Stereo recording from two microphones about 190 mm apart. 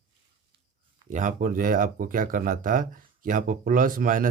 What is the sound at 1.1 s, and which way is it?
Speech, 45° right (ahead or behind).